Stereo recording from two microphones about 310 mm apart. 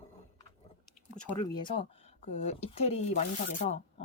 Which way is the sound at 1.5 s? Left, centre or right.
Centre.